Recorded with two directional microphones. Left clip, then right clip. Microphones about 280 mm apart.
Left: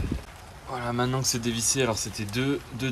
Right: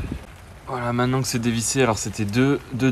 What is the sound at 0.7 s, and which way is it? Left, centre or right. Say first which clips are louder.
Speech: right 5 dB; centre.